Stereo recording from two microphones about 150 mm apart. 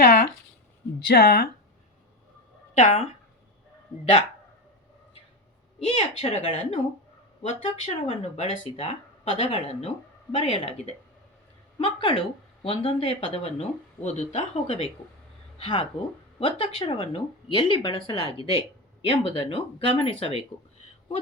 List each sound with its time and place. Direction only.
0.0 s a sound: 90° left
1.0 s speech: 90° left
2.7 s speech: 45° left (ahead or behind)
6.0 s speech: 40° left (ahead or behind)